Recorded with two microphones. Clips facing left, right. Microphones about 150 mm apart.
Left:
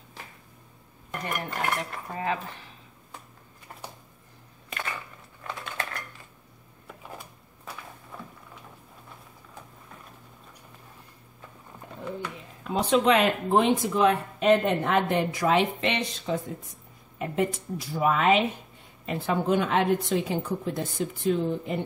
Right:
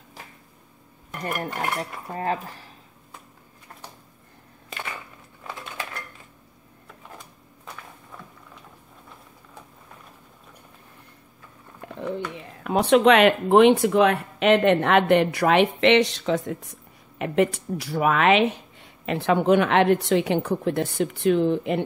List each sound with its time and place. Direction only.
1.2 s dishes: 40° right (ahead or behind)
12.0 s speech: 70° right (ahead or behind)